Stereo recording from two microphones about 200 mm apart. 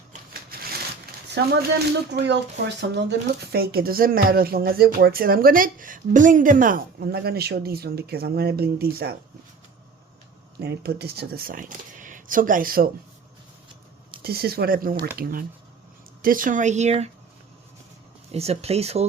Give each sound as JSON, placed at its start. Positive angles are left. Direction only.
{"t": 1.4, "sound": "speech", "side_deg": -60}
{"t": 10.6, "sound": "speech", "side_deg": -55}
{"t": 14.2, "sound": "speech", "side_deg": -50}
{"t": 18.3, "sound": "speech", "side_deg": -30}